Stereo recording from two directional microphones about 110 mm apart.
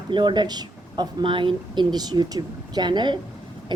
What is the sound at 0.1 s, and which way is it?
Speech, 45° right (ahead or behind).